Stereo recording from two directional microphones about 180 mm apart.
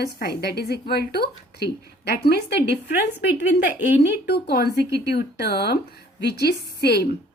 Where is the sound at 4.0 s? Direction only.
65° left (ahead or behind).